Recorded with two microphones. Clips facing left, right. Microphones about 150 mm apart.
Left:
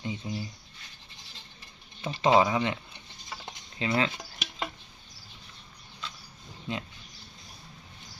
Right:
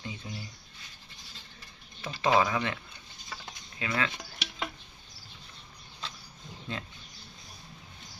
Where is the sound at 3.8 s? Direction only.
25° left (ahead or behind).